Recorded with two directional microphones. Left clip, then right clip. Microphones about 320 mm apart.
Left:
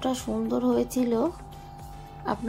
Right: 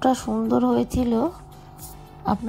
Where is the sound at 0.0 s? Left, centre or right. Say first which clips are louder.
Right 7 dB; right.